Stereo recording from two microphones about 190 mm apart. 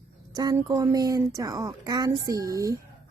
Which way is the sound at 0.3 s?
20° right (ahead or behind).